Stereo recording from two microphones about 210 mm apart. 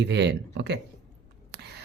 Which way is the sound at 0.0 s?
55° right (ahead or behind).